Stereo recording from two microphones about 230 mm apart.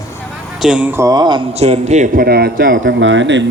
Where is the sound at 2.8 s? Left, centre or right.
Right.